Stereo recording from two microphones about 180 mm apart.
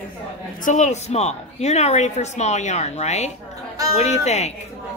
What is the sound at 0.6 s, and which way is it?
A woman's voice, 45° left (ahead or behind).